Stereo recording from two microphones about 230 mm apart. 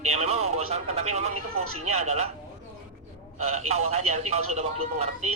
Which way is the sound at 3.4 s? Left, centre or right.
Right.